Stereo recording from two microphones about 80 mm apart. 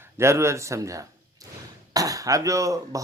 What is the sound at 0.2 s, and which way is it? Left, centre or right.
A man's voice, right.